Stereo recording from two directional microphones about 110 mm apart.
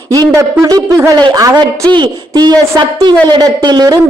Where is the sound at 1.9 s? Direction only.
45° right (ahead or behind).